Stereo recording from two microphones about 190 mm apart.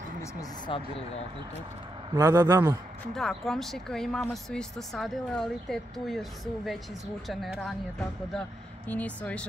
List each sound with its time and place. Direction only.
0.2 s speech: 20° left (ahead or behind)
2.1 s a man's voice: 20° right (ahead or behind)
3.2 s speech: centre (ahead or behind)
8.8 s speech: 10° left (ahead or behind)